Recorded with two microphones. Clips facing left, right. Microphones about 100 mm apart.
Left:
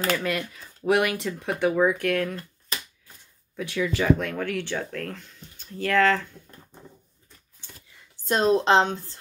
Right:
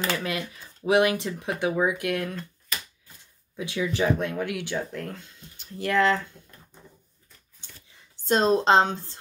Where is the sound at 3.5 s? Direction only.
20° right (ahead or behind).